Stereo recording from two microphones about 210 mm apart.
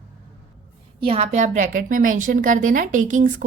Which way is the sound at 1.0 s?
30° right (ahead or behind).